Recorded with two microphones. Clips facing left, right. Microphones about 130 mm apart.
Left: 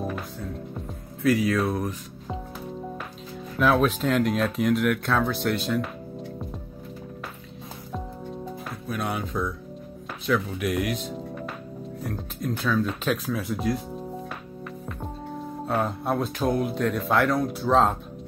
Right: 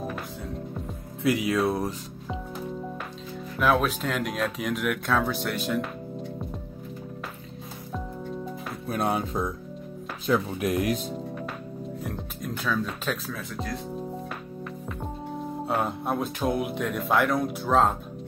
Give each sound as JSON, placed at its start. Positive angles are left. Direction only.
{"t": 1.2, "sound": "speech", "side_deg": -20}
{"t": 3.5, "sound": "speech", "side_deg": -5}
{"t": 8.8, "sound": "speech", "side_deg": -30}
{"t": 11.1, "sound": "music", "side_deg": 0}
{"t": 12.0, "sound": "speech", "side_deg": 0}
{"t": 13.3, "sound": "speech", "side_deg": 15}
{"t": 15.7, "sound": "speech", "side_deg": 0}